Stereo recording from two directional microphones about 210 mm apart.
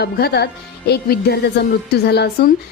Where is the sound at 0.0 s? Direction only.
50° left (ahead or behind).